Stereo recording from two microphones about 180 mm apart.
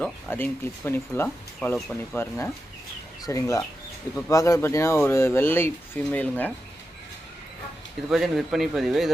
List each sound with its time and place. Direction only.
0.0 s speech: 10° left (ahead or behind)
8.1 s a man's voice: centre (ahead or behind)